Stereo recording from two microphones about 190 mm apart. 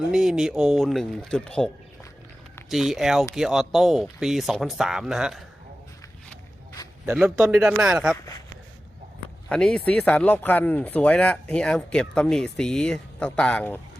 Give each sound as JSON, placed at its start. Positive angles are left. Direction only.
{"t": 0.1, "sound": "speech", "side_deg": -5}
{"t": 7.0, "sound": "speech", "side_deg": -10}
{"t": 8.1, "sound": "speech", "side_deg": 20}
{"t": 9.5, "sound": "speech", "side_deg": 5}